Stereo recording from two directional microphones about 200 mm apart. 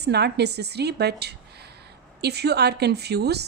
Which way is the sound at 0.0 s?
55° right (ahead or behind).